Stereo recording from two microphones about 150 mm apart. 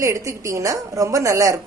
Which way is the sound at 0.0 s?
20° right (ahead or behind).